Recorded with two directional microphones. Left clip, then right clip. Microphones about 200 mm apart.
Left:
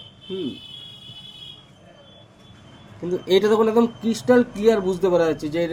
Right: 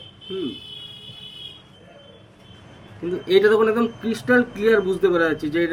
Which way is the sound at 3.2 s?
30° left (ahead or behind).